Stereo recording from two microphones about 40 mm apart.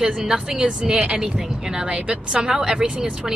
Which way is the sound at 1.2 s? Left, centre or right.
Centre.